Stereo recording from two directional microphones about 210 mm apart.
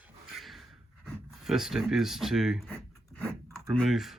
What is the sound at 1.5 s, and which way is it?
Speech, centre (ahead or behind).